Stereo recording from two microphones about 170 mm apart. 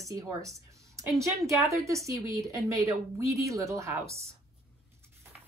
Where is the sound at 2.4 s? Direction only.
Centre (ahead or behind).